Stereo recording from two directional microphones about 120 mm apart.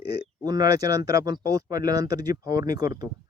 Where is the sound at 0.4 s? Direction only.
35° right (ahead or behind).